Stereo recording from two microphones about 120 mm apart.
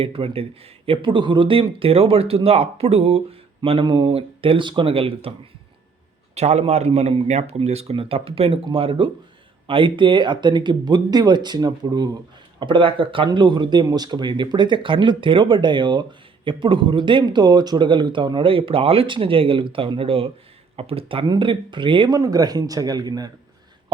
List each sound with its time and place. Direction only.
0.0 s speech: 50° right (ahead or behind)
6.3 s speech: 65° right (ahead or behind); by 22.2 s 40° right (ahead or behind)
22.2 s speech: 30° right (ahead or behind)